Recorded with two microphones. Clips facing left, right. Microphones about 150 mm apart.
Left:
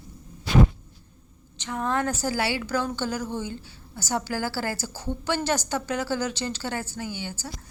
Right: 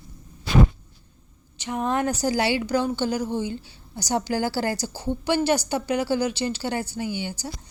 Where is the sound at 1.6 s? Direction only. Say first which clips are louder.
Right 2 dB; 20° right (ahead or behind).